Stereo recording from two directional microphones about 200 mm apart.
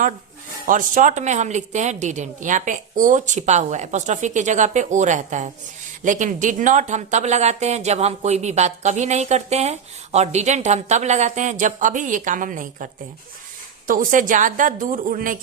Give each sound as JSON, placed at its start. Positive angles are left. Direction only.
{"t": 0.7, "sound": "a woman's voice", "side_deg": -40}